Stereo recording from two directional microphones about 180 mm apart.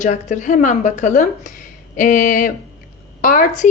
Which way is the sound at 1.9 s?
45° left (ahead or behind).